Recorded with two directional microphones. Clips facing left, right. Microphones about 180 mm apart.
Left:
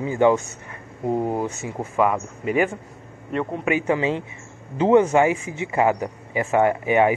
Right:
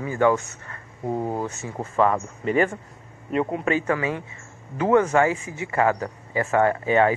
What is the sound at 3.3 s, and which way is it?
Speech, 10° right (ahead or behind).